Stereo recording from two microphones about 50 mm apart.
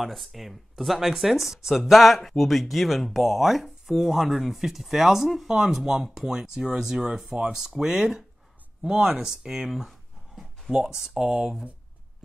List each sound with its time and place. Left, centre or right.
0.0 s speech: centre
9.7 s a sound: centre
10.7 s speech: centre